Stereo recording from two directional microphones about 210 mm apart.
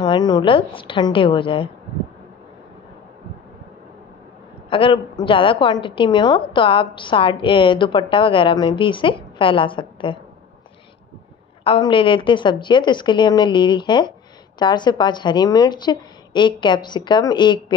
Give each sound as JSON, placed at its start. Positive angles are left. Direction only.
{"t": 0.0, "sound": "a woman's voice", "side_deg": 20}
{"t": 4.6, "sound": "a woman's voice", "side_deg": 25}
{"t": 11.6, "sound": "a woman's voice", "side_deg": 25}